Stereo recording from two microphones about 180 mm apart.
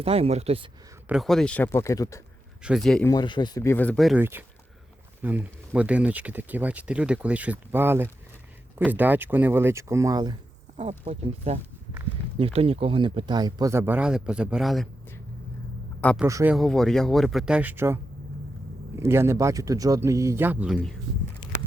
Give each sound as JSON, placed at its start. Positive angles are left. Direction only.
{"t": 0.0, "sound": "speech", "side_deg": -35}
{"t": 1.0, "sound": "speech", "side_deg": 0}
{"t": 2.6, "sound": "speech", "side_deg": 0}
{"t": 3.0, "sound": "speech", "side_deg": 20}
{"t": 4.2, "sound": "speech", "side_deg": -10}
{"t": 10.8, "sound": "speech", "side_deg": -35}
{"t": 16.2, "sound": "speech", "side_deg": -15}
{"t": 16.6, "sound": "speech", "side_deg": 5}